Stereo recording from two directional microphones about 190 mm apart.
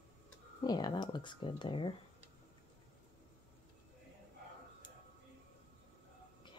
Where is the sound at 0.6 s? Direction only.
20° left (ahead or behind).